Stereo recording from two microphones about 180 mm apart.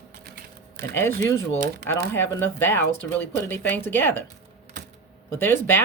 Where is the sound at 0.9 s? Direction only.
15° left (ahead or behind).